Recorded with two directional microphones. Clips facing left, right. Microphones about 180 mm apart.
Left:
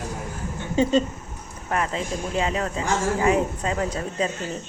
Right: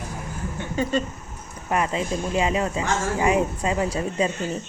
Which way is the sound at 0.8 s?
20° left (ahead or behind).